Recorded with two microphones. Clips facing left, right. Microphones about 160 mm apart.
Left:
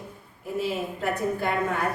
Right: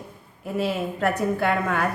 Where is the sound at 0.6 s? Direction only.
75° right (ahead or behind).